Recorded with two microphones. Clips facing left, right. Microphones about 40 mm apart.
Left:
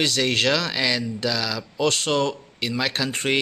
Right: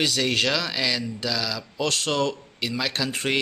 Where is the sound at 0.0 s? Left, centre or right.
Centre.